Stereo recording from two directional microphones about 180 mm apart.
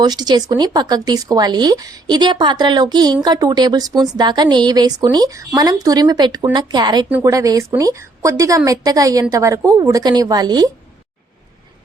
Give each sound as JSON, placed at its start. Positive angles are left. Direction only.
{"t": 0.0, "sound": "a woman's voice", "side_deg": -25}